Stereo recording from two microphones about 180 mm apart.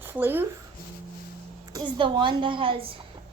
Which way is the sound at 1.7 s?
25° right (ahead or behind).